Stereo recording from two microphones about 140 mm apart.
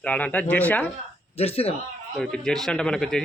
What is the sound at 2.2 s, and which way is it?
Speech, 5° left (ahead or behind).